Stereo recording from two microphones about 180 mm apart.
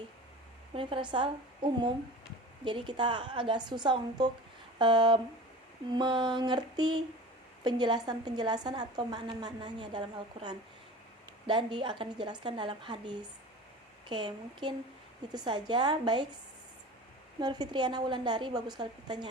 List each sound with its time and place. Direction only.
0.7 s a woman's voice: 30° right (ahead or behind)
17.4 s a woman's voice: 25° right (ahead or behind)